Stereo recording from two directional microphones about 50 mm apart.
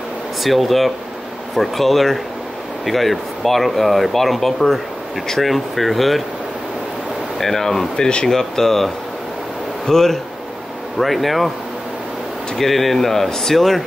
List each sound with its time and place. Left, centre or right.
0.4 s speech: centre
7.3 s speech: centre
12.5 s speech: centre